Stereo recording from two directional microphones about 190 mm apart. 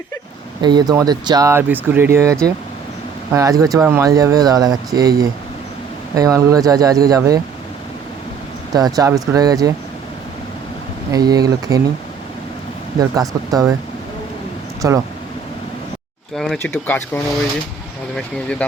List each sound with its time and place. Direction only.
0.6 s speech: 20° right (ahead or behind)
8.7 s speech: 20° right (ahead or behind)
11.1 s speech: 20° right (ahead or behind)
13.0 s speech: 20° right (ahead or behind)
14.8 s speech: 15° right (ahead or behind)
16.3 s speech: centre (ahead or behind)